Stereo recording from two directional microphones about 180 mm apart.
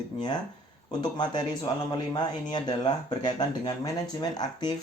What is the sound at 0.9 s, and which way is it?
Speech, 25° left (ahead or behind).